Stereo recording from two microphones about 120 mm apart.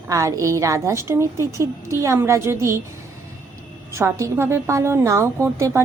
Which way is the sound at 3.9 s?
20° right (ahead or behind).